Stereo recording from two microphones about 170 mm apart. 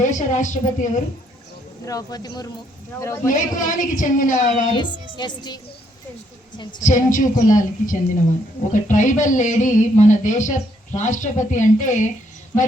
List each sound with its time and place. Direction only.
0.0 s speech: 45° left (ahead or behind)
1.8 s a woman's voice: 20° left (ahead or behind)
3.3 s speech: 50° left (ahead or behind)
4.7 s a woman's voice: 25° left (ahead or behind)
6.8 s speech: 50° left (ahead or behind)